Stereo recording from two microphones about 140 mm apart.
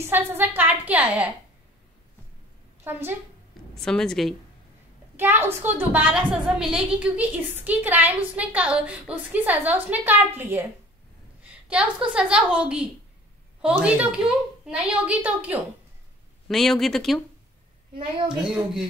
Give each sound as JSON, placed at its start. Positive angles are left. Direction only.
{"t": 0.0, "sound": "a woman's voice", "side_deg": -15}
{"t": 2.8, "sound": "a woman's voice", "side_deg": -15}
{"t": 3.7, "sound": "speech", "side_deg": 5}
{"t": 5.1, "sound": "a woman's voice", "side_deg": -15}
{"t": 16.4, "sound": "speech", "side_deg": 0}
{"t": 18.4, "sound": "speech", "side_deg": -5}